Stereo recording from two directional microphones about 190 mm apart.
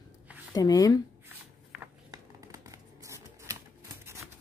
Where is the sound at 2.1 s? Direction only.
15° right (ahead or behind).